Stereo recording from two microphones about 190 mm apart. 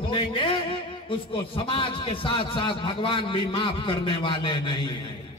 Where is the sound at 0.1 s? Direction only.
25° left (ahead or behind).